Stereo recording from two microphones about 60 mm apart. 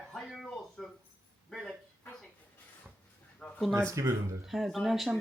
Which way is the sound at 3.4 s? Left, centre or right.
Left.